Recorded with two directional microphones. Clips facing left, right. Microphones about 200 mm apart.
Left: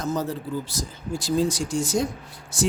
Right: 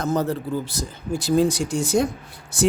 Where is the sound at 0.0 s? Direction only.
60° right (ahead or behind).